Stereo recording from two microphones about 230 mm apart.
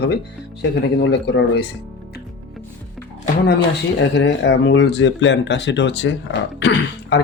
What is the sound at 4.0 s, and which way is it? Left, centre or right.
Speech, left.